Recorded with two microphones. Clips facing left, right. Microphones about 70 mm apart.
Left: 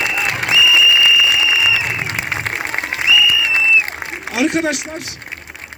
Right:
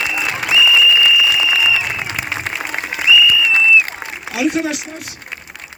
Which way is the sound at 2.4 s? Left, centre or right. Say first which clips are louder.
Left 1 dB; left.